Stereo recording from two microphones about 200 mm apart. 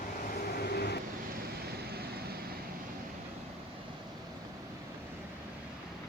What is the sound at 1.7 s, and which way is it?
Vehicle, 50° right (ahead or behind).